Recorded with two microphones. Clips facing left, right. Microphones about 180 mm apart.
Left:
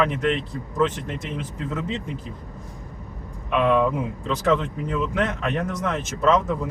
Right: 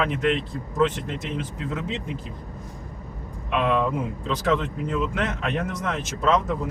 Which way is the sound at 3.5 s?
Centre (ahead or behind).